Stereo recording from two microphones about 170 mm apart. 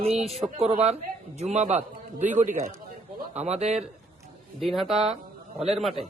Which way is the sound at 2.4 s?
45° right (ahead or behind).